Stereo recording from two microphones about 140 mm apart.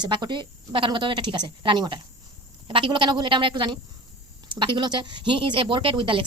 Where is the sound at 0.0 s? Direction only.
30° right (ahead or behind).